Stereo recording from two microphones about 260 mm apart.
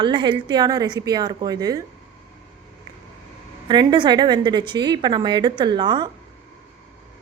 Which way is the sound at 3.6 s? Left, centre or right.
Centre.